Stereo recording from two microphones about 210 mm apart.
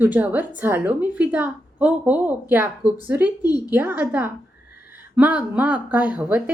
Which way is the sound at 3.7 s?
10° right (ahead or behind).